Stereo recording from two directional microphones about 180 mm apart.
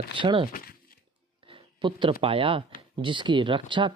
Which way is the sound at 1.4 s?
30° right (ahead or behind).